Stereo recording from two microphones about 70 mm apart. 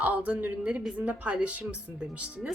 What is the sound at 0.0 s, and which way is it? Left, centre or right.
Speech, right.